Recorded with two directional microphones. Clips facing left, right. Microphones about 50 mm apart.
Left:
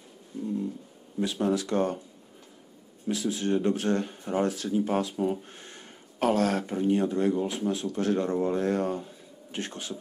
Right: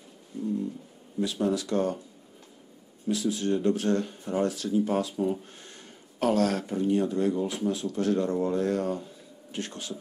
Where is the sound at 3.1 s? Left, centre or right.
Left.